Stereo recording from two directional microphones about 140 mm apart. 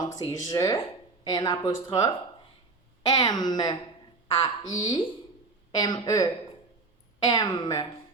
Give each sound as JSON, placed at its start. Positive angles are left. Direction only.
{"t": 0.0, "sound": "speech", "side_deg": 25}
{"t": 7.3, "sound": "speech", "side_deg": 30}